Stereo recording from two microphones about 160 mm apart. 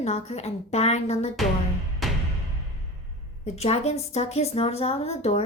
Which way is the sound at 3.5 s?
40° left (ahead or behind).